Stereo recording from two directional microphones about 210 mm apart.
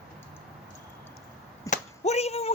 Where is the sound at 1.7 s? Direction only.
30° left (ahead or behind).